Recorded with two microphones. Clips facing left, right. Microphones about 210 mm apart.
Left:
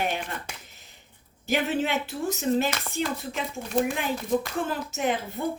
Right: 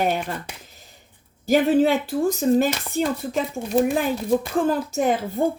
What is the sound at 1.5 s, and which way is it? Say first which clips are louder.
Speech: right 9 dB; 35° right (ahead or behind).